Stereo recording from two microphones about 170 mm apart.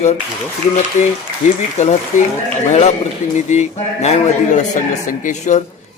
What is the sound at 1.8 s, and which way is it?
Speech, 45° left (ahead or behind).